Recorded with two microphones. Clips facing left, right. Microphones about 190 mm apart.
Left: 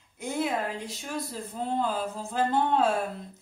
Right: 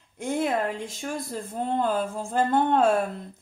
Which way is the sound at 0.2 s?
50° right (ahead or behind).